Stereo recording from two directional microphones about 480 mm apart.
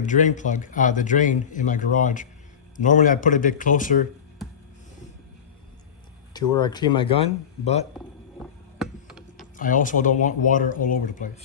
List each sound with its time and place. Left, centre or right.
0.0 s a man's voice: centre
6.3 s a man's voice: centre
8.8 s a sound: centre
9.6 s a man's voice: centre